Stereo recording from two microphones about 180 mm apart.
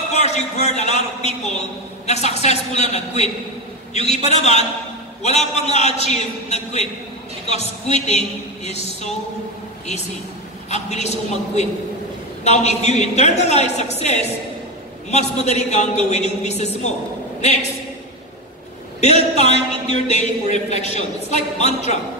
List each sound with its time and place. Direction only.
0.1 s a man's voice: 40° left (ahead or behind)
10.7 s a man's voice: 40° left (ahead or behind)
18.9 s a man's voice: 40° left (ahead or behind)